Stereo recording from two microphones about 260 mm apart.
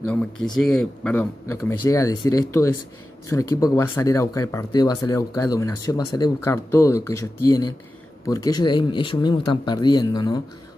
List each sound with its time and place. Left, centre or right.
0.0 s speech: centre